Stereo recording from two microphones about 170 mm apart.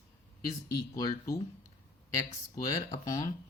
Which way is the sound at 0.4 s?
20° left (ahead or behind).